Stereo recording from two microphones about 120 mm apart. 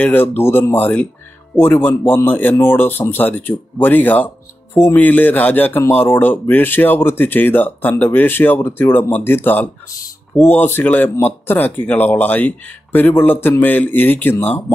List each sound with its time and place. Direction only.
0.0 s speech: 15° left (ahead or behind)